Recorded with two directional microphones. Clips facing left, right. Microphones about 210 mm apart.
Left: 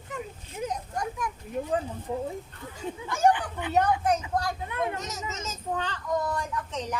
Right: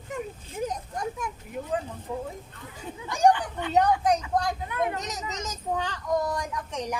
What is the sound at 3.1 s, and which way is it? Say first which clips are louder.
A woman's voice: right 2 dB; 15° right (ahead or behind).